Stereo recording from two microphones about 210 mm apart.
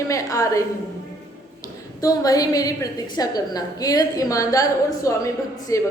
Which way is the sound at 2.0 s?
15° left (ahead or behind).